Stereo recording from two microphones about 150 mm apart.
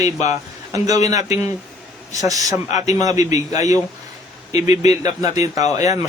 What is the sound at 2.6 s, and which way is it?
Speech, 50° left (ahead or behind).